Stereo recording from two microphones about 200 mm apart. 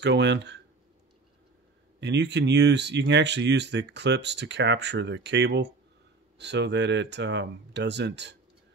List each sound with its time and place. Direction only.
0.0 s speech: 60° right (ahead or behind)
2.0 s speech: 60° right (ahead or behind)